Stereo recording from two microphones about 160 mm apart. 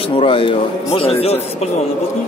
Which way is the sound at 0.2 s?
35° left (ahead or behind).